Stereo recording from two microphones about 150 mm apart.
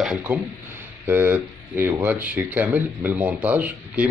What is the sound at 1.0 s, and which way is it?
Speech, 15° right (ahead or behind).